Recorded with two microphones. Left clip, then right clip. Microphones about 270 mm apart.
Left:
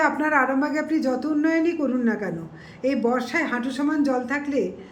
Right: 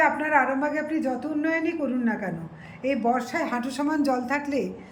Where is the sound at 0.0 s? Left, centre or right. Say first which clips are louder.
Left 1 dB; centre.